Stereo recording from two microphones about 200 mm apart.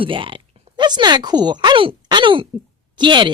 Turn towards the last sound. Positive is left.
turn(degrees=-25)  # may be behind; listen again after turning